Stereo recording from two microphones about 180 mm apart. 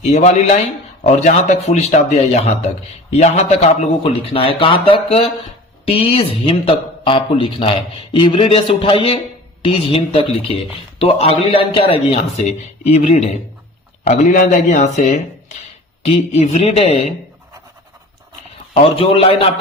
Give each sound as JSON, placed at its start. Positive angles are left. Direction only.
{"t": 0.1, "sound": "a man's voice", "side_deg": 35}
{"t": 18.7, "sound": "a man's voice", "side_deg": 30}